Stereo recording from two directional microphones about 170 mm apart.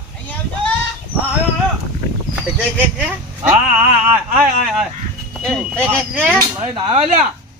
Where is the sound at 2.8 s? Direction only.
10° right (ahead or behind).